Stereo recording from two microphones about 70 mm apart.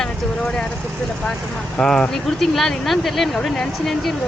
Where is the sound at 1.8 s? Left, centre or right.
Centre.